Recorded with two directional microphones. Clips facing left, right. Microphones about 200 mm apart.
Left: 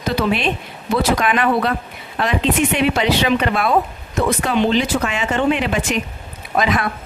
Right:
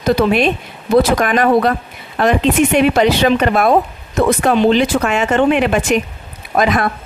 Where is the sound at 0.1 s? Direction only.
45° right (ahead or behind).